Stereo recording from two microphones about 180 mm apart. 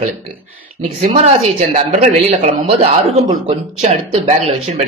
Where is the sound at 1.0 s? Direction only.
35° right (ahead or behind).